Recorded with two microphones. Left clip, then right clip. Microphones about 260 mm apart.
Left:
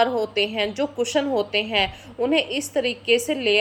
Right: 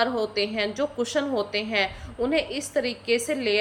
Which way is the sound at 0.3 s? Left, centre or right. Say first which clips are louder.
Left 3 dB; centre.